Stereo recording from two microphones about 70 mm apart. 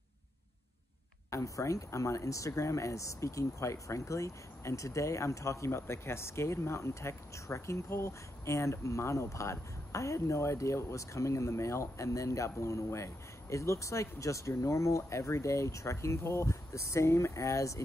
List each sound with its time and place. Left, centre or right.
1.3 s speech: left